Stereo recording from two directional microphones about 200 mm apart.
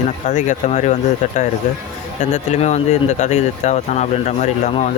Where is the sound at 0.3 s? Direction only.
40° left (ahead or behind).